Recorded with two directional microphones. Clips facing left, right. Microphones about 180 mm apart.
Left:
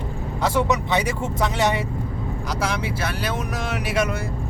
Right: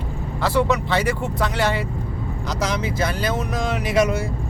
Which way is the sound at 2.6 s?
10° left (ahead or behind).